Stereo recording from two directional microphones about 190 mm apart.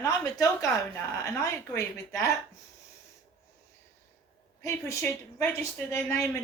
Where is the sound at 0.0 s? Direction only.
20° left (ahead or behind).